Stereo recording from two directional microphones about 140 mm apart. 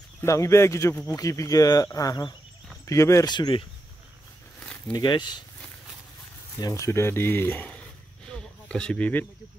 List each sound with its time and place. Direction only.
0.2 s speech: 20° left (ahead or behind)
3.3 s speech: 35° left (ahead or behind)
4.9 s speech: 30° left (ahead or behind)
6.6 s speech: 25° left (ahead or behind)
8.3 s a sound: 5° left (ahead or behind)